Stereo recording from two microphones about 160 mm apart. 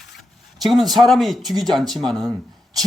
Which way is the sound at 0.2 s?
Centre (ahead or behind).